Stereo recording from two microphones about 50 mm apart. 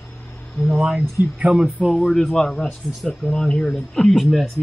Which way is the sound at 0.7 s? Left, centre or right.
Centre.